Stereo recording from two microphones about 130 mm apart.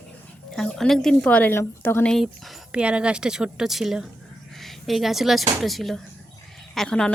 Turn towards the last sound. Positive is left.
turn(degrees=5)  # may be behind; listen again after turning